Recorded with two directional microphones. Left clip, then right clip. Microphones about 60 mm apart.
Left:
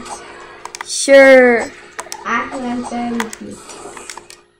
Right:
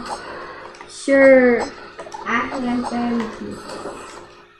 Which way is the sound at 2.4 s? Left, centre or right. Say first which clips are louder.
Even; left.